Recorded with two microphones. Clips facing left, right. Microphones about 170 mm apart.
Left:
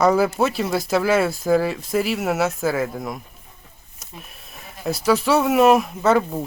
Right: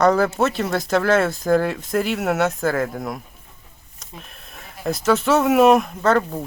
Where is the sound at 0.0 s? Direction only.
5° left (ahead or behind).